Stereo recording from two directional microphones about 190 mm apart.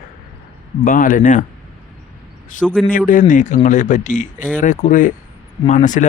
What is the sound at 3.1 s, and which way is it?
Speech, 45° left (ahead or behind).